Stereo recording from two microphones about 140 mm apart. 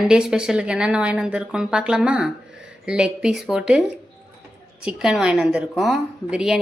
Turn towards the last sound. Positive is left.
turn(degrees=-5)  # may be behind; listen again after turning